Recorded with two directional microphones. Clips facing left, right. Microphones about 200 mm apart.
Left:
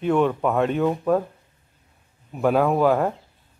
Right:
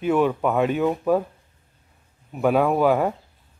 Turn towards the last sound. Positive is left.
turn(degrees=0)  # may be behind; listen again after turning